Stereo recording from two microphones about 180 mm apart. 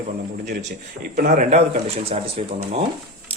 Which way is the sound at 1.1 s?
55° right (ahead or behind).